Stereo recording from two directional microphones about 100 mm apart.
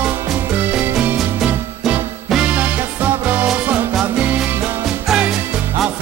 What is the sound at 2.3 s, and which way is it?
Music, 10° right (ahead or behind).